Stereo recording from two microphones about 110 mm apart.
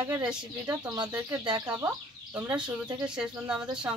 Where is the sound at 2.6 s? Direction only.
45° right (ahead or behind).